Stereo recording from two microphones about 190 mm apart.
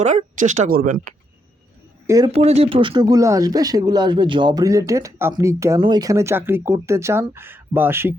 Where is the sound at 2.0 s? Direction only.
20° right (ahead or behind).